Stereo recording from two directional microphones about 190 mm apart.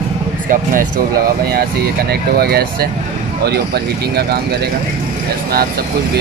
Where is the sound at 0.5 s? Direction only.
45° right (ahead or behind).